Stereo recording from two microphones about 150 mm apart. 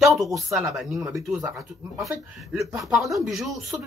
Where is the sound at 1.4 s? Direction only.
20° right (ahead or behind).